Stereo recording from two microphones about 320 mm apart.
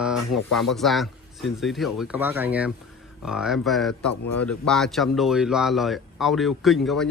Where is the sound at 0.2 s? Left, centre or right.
Left.